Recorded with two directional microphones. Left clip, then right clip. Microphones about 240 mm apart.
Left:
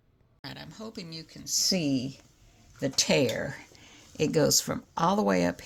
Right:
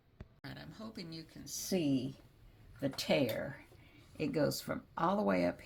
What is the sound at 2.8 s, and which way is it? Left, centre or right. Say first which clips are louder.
Speech: left 8 dB; left.